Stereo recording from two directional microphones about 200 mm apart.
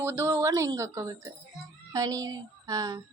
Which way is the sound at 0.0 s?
15° right (ahead or behind).